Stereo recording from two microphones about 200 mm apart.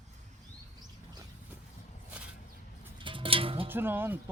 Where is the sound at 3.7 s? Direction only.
10° right (ahead or behind).